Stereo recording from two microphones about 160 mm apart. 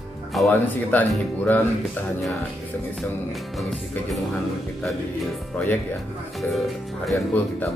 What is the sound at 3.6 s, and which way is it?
Speech, centre (ahead or behind).